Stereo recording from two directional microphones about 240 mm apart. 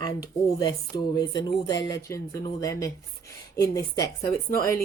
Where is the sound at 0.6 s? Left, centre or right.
Centre.